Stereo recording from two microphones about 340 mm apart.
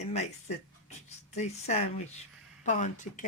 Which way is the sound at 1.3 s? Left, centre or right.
Centre.